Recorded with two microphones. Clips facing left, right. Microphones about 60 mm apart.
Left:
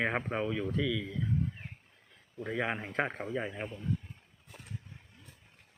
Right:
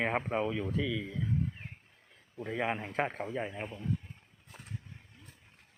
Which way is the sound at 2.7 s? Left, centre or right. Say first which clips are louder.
Even; centre.